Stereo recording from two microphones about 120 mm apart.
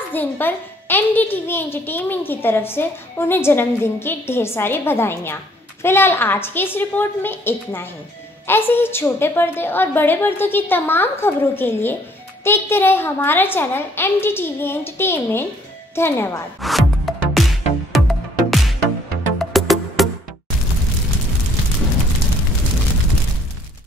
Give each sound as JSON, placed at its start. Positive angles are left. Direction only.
{"t": 0.1, "sound": "a woman's voice", "side_deg": 15}
{"t": 16.6, "sound": "music", "side_deg": 0}